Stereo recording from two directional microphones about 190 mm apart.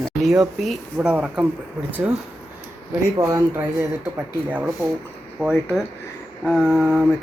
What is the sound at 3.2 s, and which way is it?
Speech, 15° right (ahead or behind).